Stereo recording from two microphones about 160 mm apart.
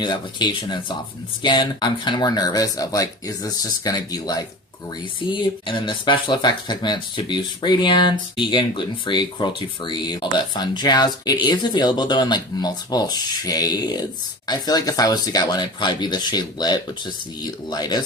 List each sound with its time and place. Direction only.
0.0 s speech: 30° left (ahead or behind)